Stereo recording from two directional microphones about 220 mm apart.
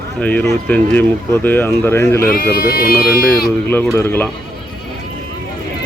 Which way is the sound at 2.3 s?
45° left (ahead or behind).